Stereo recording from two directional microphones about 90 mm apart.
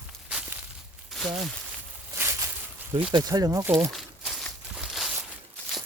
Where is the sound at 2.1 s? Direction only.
25° right (ahead or behind).